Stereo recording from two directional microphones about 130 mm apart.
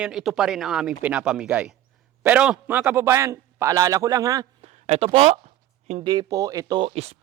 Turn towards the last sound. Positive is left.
turn(degrees=-50)  # may be behind; listen again after turning